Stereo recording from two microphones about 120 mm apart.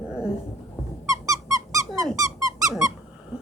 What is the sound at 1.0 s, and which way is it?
Squeak, 30° right (ahead or behind).